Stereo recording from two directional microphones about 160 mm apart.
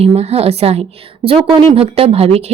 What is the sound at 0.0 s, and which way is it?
Speech, 40° right (ahead or behind).